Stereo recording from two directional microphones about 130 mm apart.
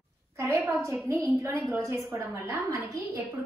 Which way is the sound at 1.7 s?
20° right (ahead or behind).